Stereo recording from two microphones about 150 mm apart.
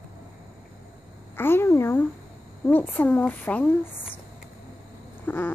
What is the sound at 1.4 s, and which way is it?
Speech, 15° left (ahead or behind).